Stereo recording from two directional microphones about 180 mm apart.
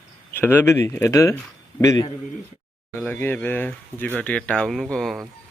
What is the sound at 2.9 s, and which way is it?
Speech, 10° left (ahead or behind).